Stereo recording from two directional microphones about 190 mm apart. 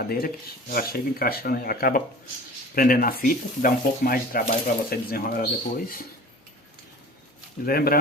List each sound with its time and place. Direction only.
0.0 s speech: 50° left (ahead or behind)
7.6 s speech: 50° left (ahead or behind)